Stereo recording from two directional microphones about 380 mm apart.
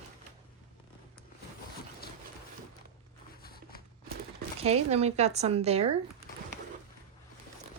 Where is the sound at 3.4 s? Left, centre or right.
Left.